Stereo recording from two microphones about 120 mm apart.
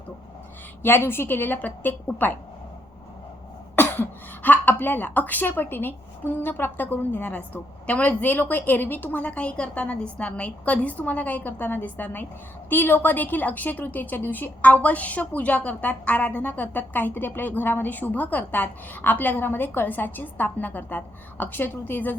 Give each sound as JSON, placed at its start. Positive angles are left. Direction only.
{"t": 0.8, "sound": "a woman's voice", "side_deg": 20}
{"t": 3.8, "sound": "a woman's voice", "side_deg": 15}